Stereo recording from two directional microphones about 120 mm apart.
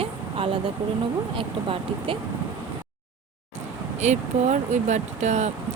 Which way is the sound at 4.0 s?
75° right (ahead or behind).